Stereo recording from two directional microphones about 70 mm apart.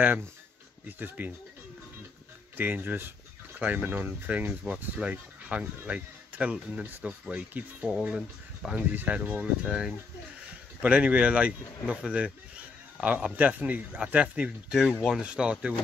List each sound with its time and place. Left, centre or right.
0.8 s speech: right
2.5 s speech: right
8.9 s speech: right
9.4 s speech: centre